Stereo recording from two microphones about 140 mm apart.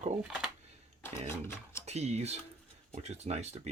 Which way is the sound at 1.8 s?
50° right (ahead or behind).